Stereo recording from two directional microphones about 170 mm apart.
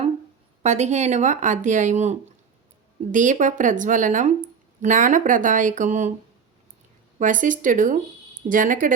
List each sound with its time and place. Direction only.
0.6 s speech: 40° right (ahead or behind)
7.2 s speech: 50° right (ahead or behind)